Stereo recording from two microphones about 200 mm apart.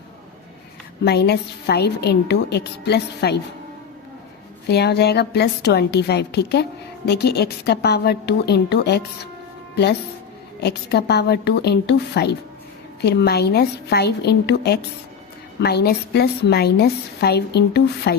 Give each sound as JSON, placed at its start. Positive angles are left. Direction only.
{"t": 1.0, "sound": "a woman's voice", "side_deg": 55}
{"t": 4.7, "sound": "a woman's voice", "side_deg": 55}
{"t": 10.6, "sound": "a woman's voice", "side_deg": 55}